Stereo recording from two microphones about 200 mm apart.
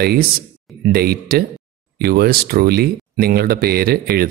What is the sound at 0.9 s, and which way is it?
Speech, 50° right (ahead or behind).